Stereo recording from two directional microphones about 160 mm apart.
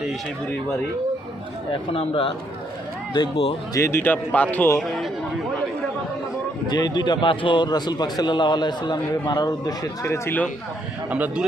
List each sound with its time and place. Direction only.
1.7 s speech: 35° left (ahead or behind)
3.8 s a man's voice: 15° left (ahead or behind)
6.7 s a man's voice: 25° left (ahead or behind)
11.1 s speech: 10° right (ahead or behind)